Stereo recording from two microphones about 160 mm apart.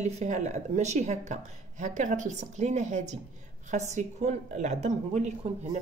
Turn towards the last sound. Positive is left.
turn(degrees=-45)  # may be behind; listen again after turning